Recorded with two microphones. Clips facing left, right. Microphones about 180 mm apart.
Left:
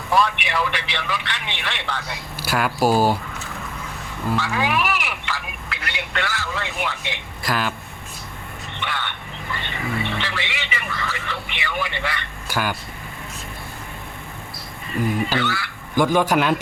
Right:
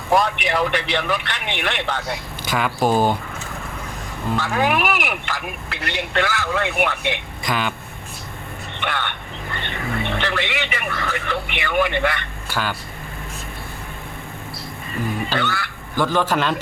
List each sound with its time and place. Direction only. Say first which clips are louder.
0.1 s a man's voice: right 2 dB; 45° right (ahead or behind)
2.4 s speech: left 1 dB; 5° left (ahead or behind)
4.4 s a man's voice: right 3 dB; 50° right (ahead or behind)
5.6 s speech: right 5 dB; 35° right (ahead or behind)
6.2 s speech: right 6 dB; 60° right (ahead or behind)
7.4 s speech: even; centre (ahead or behind)
8.8 s vehicle: right 3 dB; 60° right (ahead or behind)
9.6 s music: right 1 dB; 55° right (ahead or behind)
12.5 s speech: left 1 dB; 10° left (ahead or behind)
15.4 s a man's voice: even; 55° right (ahead or behind)
16.0 s a man's voice: left 2 dB; 15° left (ahead or behind)